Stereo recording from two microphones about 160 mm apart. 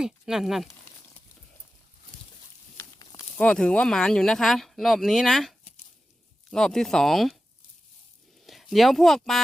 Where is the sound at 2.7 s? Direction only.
20° left (ahead or behind).